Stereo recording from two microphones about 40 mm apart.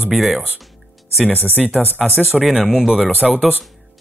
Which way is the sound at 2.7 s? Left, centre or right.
Centre.